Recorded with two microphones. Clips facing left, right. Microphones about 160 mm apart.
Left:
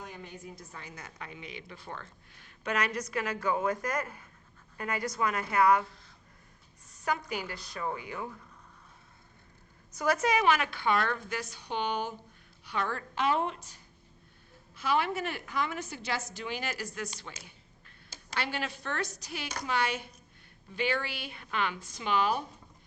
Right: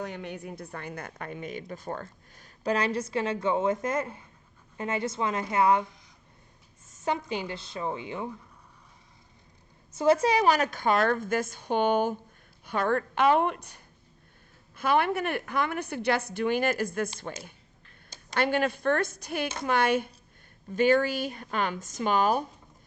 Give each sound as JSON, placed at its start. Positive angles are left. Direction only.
{"t": 0.0, "sound": "a woman's voice", "side_deg": -70}
{"t": 9.9, "sound": "a woman's voice", "side_deg": -25}